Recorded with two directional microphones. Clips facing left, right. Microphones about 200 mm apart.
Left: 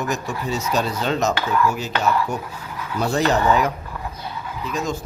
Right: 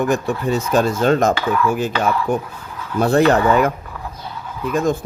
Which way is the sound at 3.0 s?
55° right (ahead or behind).